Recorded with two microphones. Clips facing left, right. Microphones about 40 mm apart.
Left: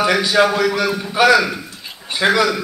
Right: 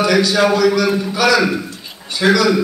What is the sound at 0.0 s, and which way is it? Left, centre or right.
Speech, left.